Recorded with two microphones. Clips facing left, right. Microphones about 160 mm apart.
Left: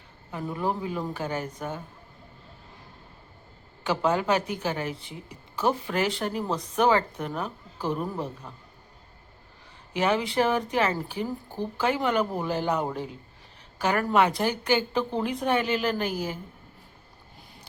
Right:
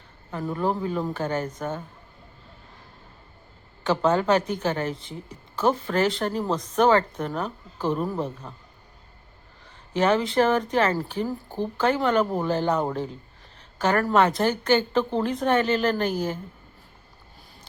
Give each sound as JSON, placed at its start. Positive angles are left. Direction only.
{"t": 0.3, "sound": "speech", "side_deg": 10}
{"t": 3.8, "sound": "speech", "side_deg": 10}
{"t": 7.9, "sound": "a woman's voice", "side_deg": -20}
{"t": 9.9, "sound": "speech", "side_deg": 10}
{"t": 11.4, "sound": "speech", "side_deg": -20}
{"t": 11.8, "sound": "speech", "side_deg": 10}